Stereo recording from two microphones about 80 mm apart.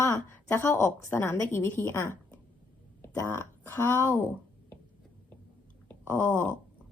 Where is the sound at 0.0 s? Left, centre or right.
Left.